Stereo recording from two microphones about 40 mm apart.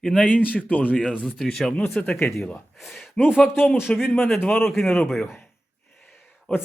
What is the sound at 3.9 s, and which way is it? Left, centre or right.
Speech, left.